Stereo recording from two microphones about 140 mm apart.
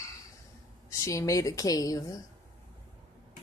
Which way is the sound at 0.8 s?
25° left (ahead or behind).